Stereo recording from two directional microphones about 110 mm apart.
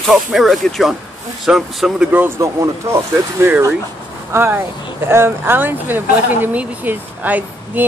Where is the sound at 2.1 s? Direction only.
15° right (ahead or behind).